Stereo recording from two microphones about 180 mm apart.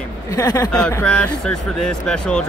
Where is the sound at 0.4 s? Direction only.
20° left (ahead or behind).